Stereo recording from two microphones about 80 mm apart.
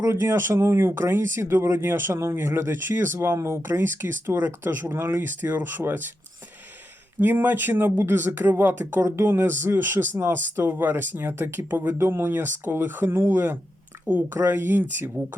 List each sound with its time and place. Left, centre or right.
0.2 s speech: right
7.2 s speech: right